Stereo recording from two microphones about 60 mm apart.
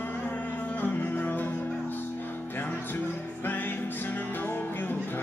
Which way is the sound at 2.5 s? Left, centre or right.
Left.